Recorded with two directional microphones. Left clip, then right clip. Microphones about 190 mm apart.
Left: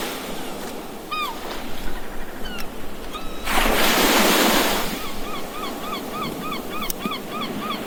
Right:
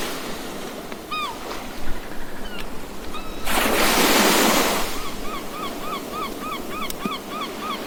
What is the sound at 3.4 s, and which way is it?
Waves, 45° right (ahead or behind).